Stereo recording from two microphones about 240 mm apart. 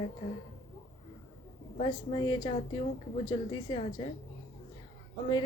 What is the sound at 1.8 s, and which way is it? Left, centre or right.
A woman's voice, centre.